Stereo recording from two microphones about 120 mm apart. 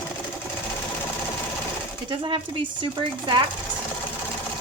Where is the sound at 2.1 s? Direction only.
45° right (ahead or behind).